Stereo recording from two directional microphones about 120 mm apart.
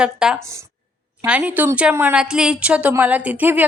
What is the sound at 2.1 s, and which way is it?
Speech, 5° right (ahead or behind).